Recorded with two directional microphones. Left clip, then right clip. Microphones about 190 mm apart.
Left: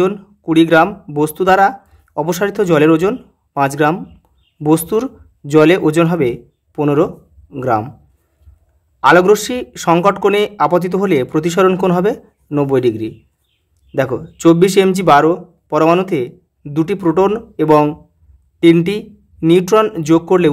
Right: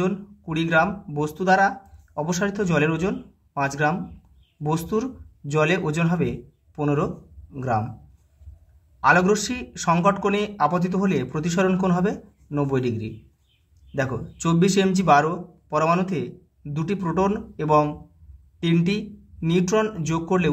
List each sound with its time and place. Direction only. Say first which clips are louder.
0.0 s speech: left 11 dB; 50° left (ahead or behind)
9.0 s speech: left 9 dB; 50° left (ahead or behind)